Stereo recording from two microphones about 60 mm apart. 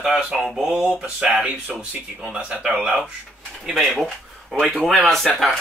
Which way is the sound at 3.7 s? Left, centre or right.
Centre.